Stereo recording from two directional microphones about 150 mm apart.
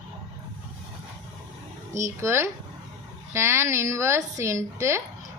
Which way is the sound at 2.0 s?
20° right (ahead or behind).